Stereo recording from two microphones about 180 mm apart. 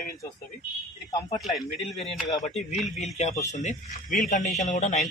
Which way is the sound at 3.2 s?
40° left (ahead or behind).